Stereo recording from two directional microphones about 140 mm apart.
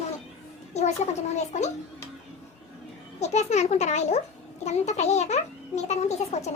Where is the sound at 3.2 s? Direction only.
55° left (ahead or behind).